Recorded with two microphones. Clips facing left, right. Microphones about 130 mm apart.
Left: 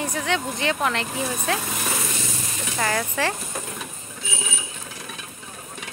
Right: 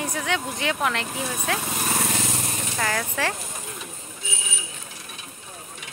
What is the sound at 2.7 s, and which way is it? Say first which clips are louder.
Speech: left 3 dB; 5° left (ahead or behind).